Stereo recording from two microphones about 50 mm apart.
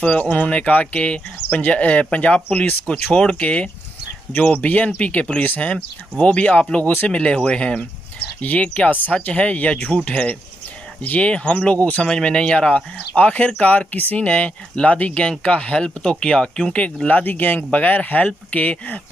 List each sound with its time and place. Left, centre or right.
0.0 s speech: left
5.8 s speech: left